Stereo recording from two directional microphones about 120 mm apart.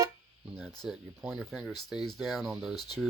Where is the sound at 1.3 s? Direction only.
Centre (ahead or behind).